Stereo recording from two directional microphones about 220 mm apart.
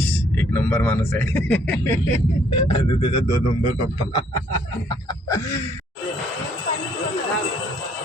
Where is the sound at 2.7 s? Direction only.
20° left (ahead or behind).